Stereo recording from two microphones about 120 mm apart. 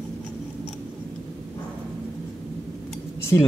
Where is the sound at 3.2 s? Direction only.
20° left (ahead or behind).